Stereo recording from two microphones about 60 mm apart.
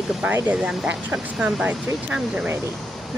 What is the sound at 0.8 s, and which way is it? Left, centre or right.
Speech, centre.